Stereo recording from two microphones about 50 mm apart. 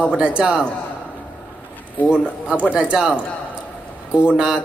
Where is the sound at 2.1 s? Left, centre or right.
Centre.